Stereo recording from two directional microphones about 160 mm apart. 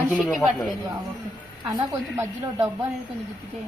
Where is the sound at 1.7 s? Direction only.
20° right (ahead or behind).